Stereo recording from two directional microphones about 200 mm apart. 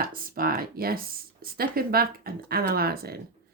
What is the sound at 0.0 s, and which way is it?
Speech, 45° right (ahead or behind).